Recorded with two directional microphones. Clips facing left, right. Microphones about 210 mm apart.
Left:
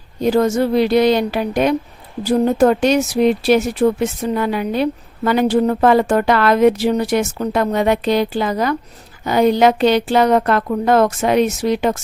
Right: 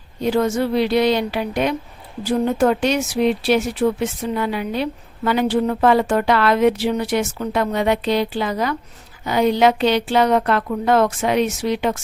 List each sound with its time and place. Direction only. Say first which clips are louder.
0.2 s speech: left 4 dB; 40° left (ahead or behind)